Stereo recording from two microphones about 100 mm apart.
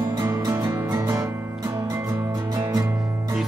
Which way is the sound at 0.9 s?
40° right (ahead or behind).